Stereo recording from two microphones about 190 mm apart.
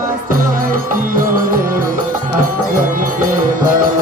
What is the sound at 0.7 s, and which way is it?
Music, 45° right (ahead or behind).